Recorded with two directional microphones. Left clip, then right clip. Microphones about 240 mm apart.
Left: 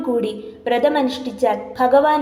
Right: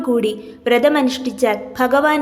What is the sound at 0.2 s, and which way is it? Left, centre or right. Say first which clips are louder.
A woman's voice: right 3 dB; right.